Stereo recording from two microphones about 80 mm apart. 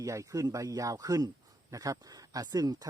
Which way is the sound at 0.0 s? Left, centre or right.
Right.